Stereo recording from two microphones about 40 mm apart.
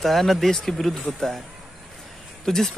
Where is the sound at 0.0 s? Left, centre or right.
Centre.